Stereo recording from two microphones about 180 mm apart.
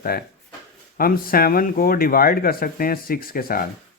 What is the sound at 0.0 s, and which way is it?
Speech, 55° left (ahead or behind).